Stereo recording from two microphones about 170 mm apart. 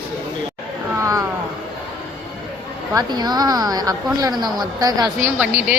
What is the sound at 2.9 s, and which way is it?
Speech, 25° right (ahead or behind).